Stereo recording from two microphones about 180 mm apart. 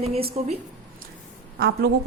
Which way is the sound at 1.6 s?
60° right (ahead or behind).